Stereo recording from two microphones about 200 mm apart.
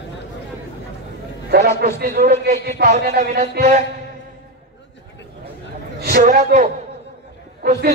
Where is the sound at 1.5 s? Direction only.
50° right (ahead or behind).